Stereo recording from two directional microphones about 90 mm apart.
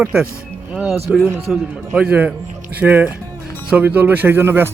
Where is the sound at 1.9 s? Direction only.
15° right (ahead or behind).